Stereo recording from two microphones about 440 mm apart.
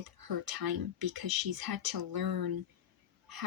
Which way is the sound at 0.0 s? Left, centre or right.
Right.